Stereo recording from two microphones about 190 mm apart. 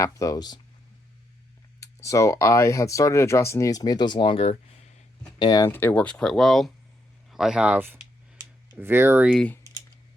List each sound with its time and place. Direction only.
0.0 s speech: 15° left (ahead or behind)
1.8 s speech: 15° left (ahead or behind); by 9.3 s 10° right (ahead or behind)
9.3 s speech: 5° left (ahead or behind)